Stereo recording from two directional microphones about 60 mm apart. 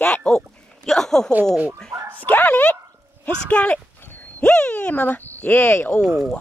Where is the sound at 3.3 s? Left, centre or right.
Left.